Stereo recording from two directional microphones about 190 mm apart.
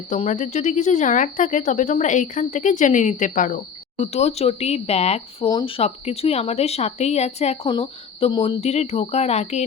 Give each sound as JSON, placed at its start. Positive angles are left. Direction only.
{"t": 0.1, "sound": "speech", "side_deg": 40}
{"t": 8.6, "sound": "speech", "side_deg": 35}